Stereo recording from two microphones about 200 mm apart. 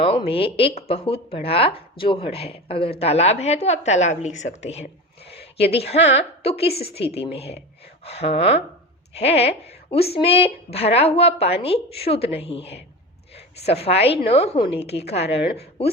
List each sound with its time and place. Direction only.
0.0 s a woman's voice: 25° left (ahead or behind)